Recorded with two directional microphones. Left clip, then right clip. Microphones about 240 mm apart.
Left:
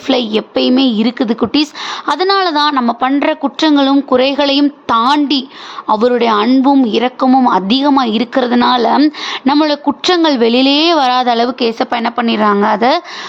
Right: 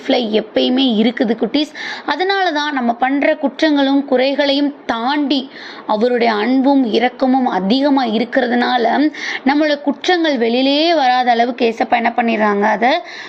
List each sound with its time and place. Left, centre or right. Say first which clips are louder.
0.1 s a woman's voice: left 1 dB; centre